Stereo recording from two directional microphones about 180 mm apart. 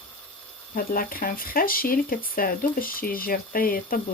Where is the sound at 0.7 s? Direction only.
50° left (ahead or behind).